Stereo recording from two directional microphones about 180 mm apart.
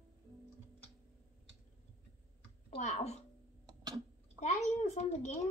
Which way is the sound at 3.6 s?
25° right (ahead or behind).